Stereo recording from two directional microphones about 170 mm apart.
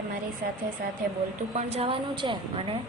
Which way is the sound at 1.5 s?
35° right (ahead or behind).